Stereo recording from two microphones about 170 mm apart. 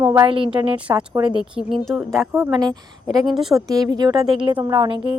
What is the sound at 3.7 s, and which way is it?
Speech, 20° right (ahead or behind).